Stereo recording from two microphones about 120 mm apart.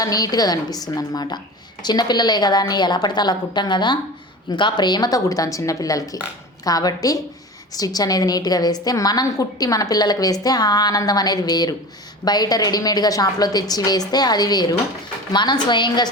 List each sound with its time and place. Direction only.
0.0 s a woman's voice: 30° left (ahead or behind)